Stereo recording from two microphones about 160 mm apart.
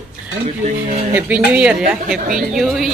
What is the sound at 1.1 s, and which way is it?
A woman's voice, 10° right (ahead or behind).